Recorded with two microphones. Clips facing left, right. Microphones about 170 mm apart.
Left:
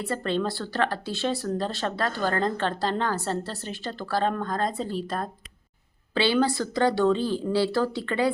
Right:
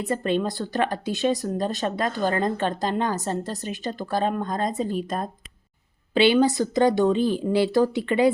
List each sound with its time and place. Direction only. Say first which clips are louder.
0.0 s speech: right 3 dB; 15° right (ahead or behind)